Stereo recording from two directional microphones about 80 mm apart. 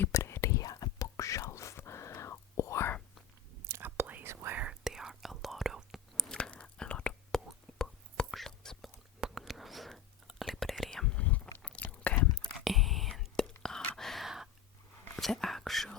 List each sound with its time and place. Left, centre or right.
0.1 s whispering: left
3.7 s whispering: right
4.7 s whispering: centre
6.3 s whispering: centre
12.6 s whispering: centre